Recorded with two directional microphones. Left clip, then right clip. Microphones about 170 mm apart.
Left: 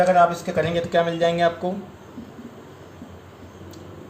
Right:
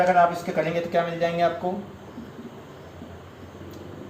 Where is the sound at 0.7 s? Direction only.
60° left (ahead or behind).